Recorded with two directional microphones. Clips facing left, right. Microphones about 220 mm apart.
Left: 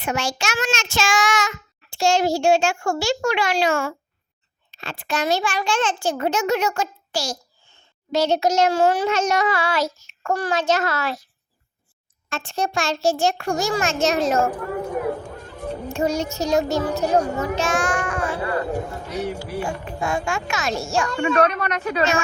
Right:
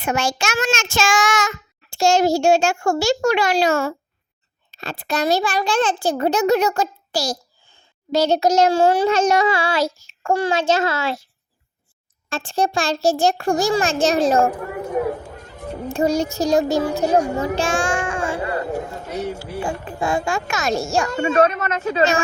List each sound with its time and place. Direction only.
0.0 s child singing: 50° right (ahead or behind)
4.7 s a child's voice: 40° right (ahead or behind)
12.3 s a child's voice: 30° right (ahead or behind)
15.1 s chatter: 5° right (ahead or behind)
15.9 s a child's voice: 35° right (ahead or behind)
17.5 s child singing: 30° right (ahead or behind)
19.2 s speech: 10° right (ahead or behind)
19.6 s a child's voice: 30° right (ahead or behind)
21.1 s a woman's voice: 25° right (ahead or behind)